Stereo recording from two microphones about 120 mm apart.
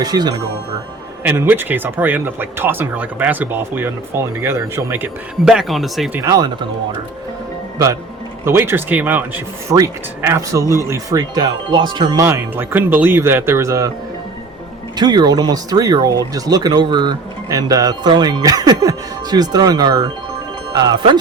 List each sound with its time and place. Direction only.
0.0 s speech: 35° right (ahead or behind)
1.2 s speech: 15° right (ahead or behind)
5.5 s speech: centre (ahead or behind)
6.1 s speech: 25° right (ahead or behind)
8.4 s speech: 20° right (ahead or behind)
9.6 s speech: 25° right (ahead or behind)
12.2 s speech: 20° right (ahead or behind)
14.9 s speech: 35° right (ahead or behind)